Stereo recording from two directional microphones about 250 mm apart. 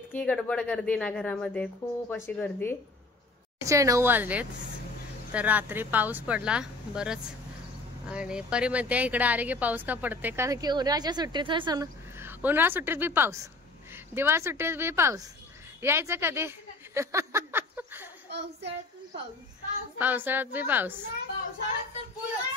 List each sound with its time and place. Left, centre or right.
0.1 s a woman's voice: centre
3.6 s a woman's voice: centre
18.3 s child singing: right
20.0 s a woman's voice: centre